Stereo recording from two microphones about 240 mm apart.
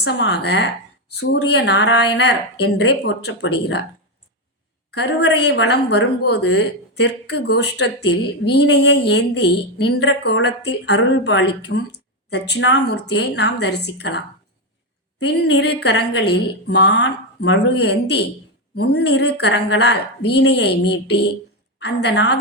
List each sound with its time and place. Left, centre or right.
0.0 s speech: left
4.9 s a woman's voice: left